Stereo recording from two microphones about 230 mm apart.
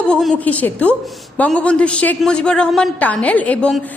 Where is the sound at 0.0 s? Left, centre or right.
Centre.